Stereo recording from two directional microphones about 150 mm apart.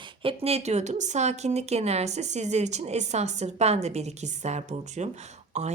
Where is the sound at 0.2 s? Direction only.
40° right (ahead or behind).